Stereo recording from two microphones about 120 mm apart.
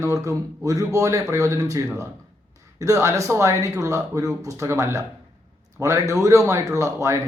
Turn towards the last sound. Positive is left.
turn(degrees=-25)  # may be behind; listen again after turning